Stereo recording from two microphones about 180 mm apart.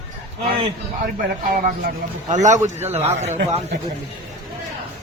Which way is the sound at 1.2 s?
50° right (ahead or behind).